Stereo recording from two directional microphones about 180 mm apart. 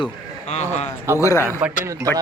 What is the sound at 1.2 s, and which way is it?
Speech, 15° left (ahead or behind).